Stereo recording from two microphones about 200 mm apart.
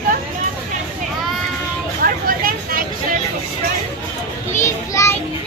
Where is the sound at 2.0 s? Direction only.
45° right (ahead or behind).